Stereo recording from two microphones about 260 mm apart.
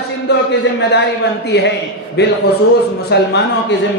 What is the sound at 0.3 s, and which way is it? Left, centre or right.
Speech, left.